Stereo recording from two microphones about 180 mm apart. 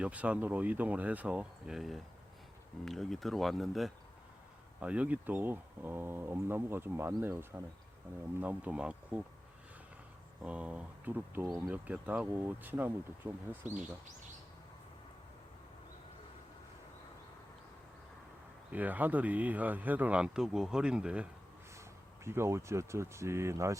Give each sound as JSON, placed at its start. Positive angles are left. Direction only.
{"t": 0.0, "sound": "speech", "side_deg": -10}
{"t": 10.4, "sound": "speech", "side_deg": -5}
{"t": 18.7, "sound": "speech", "side_deg": -10}